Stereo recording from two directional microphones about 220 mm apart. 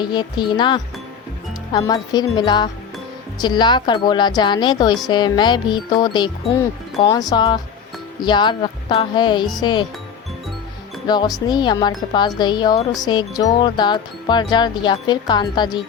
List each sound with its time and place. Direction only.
0.0 s speech: 20° left (ahead or behind)
11.0 s speech: 20° left (ahead or behind)